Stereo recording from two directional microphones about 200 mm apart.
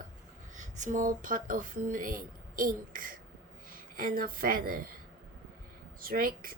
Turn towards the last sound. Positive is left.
turn(degrees=-45)  # may be behind; listen again after turning